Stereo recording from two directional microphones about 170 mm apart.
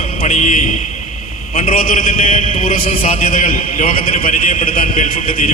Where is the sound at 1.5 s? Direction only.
55° left (ahead or behind).